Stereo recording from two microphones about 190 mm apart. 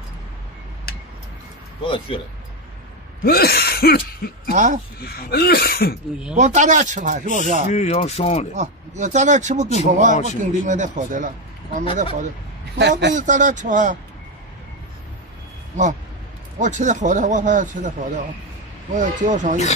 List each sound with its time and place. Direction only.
1.9 s speech: 30° left (ahead or behind)
3.3 s speech: 55° left (ahead or behind)
4.5 s a man's voice: 40° right (ahead or behind)
5.0 s speech: 55° left (ahead or behind)
6.3 s a man's voice: 40° right (ahead or behind)
7.7 s speech: 35° left (ahead or behind)
8.5 s a man's voice: 40° right (ahead or behind)
15.8 s a man's voice: 40° right (ahead or behind)